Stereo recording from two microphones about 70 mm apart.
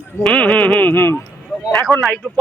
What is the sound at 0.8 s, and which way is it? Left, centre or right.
Speech, left.